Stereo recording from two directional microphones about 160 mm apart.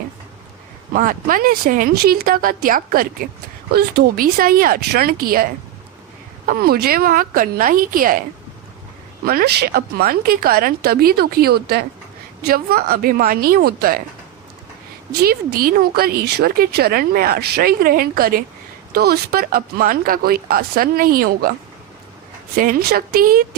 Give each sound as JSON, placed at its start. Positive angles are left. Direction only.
{"t": 0.9, "sound": "speech", "side_deg": -60}
{"t": 3.7, "sound": "speech", "side_deg": -75}
{"t": 6.5, "sound": "speech", "side_deg": -70}
{"t": 9.2, "sound": "speech", "side_deg": -75}
{"t": 15.1, "sound": "speech", "side_deg": -80}
{"t": 22.5, "sound": "speech", "side_deg": -65}